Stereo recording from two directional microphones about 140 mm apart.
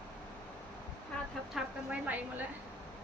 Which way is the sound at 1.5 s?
10° right (ahead or behind).